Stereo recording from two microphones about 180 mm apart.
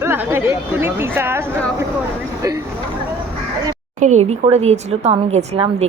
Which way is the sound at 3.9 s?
40° right (ahead or behind).